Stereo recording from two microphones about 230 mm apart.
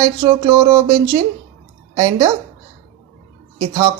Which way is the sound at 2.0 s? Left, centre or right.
Centre.